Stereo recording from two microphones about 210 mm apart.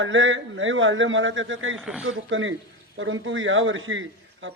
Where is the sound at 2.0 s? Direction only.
65° right (ahead or behind).